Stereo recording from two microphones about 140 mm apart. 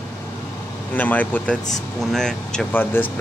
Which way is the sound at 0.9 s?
10° left (ahead or behind).